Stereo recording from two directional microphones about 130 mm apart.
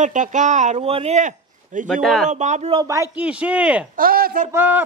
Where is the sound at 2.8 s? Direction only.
25° right (ahead or behind).